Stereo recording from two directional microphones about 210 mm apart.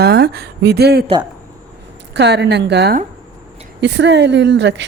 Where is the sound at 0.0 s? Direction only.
50° right (ahead or behind).